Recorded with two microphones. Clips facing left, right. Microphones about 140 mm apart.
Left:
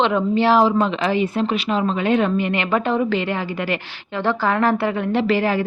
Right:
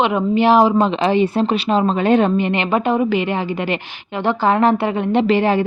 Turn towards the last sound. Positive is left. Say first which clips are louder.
# right 4 dB
turn(degrees=-25)  # may be behind; listen again after turning